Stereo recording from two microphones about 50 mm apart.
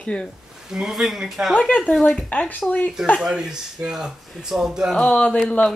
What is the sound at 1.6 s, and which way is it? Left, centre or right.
Speech, left.